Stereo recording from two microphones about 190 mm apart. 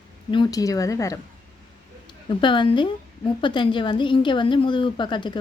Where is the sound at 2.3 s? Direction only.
25° left (ahead or behind).